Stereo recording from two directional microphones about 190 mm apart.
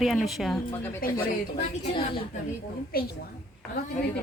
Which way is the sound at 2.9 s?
50° left (ahead or behind).